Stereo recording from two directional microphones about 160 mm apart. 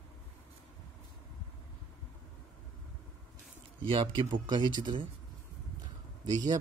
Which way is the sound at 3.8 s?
35° right (ahead or behind).